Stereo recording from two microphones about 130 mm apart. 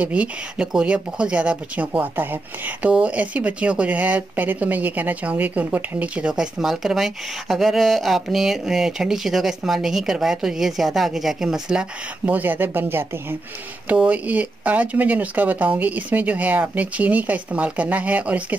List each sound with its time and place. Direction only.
0.0 s speech: 10° right (ahead or behind)